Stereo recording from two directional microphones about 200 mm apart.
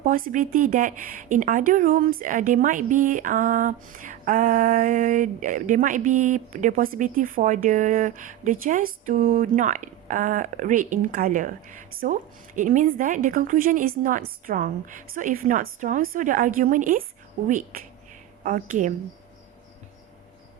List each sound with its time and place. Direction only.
0.0 s speech: 40° right (ahead or behind)